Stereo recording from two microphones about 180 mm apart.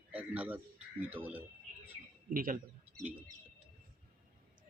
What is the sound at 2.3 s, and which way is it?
Speech, 50° right (ahead or behind).